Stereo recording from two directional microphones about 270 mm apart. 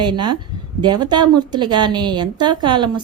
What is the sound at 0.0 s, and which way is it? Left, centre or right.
A woman's voice, centre.